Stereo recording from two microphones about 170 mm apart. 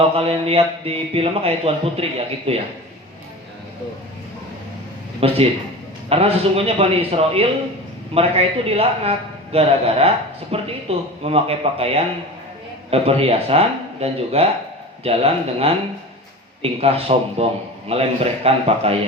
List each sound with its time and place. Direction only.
0.0 s a man's voice: 35° right (ahead or behind)
5.2 s a man's voice: 35° right (ahead or behind)
16.8 s a man's voice: 35° right (ahead or behind)